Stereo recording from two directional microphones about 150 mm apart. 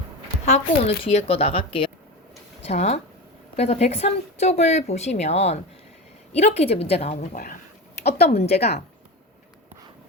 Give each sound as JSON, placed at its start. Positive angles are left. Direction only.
{"t": 0.4, "sound": "a woman's voice", "side_deg": 45}
{"t": 2.6, "sound": "speech", "side_deg": 45}